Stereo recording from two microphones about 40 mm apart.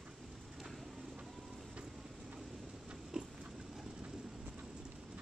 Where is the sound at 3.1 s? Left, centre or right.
Right.